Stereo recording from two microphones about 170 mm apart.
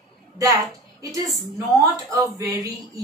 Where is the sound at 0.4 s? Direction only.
20° right (ahead or behind).